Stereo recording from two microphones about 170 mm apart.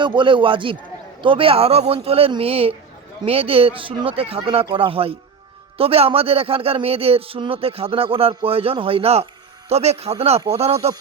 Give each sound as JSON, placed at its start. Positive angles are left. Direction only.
{"t": 0.0, "sound": "speech", "side_deg": -30}